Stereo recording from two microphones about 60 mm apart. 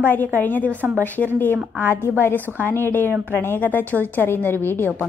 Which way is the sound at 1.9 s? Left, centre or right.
Left.